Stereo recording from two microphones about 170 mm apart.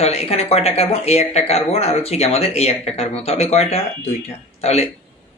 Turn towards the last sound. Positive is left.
turn(degrees=40)  # may be behind; listen again after turning